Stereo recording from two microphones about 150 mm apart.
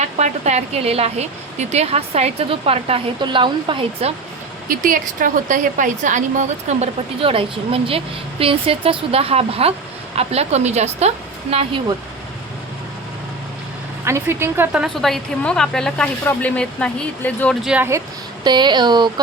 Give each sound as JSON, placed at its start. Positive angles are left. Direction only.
{"t": 0.0, "sound": "a woman's voice", "side_deg": -50}
{"t": 4.7, "sound": "a woman's voice", "side_deg": -65}
{"t": 14.0, "sound": "a woman's voice", "side_deg": -15}
{"t": 17.7, "sound": "speech", "side_deg": -15}
{"t": 18.4, "sound": "speech", "side_deg": -30}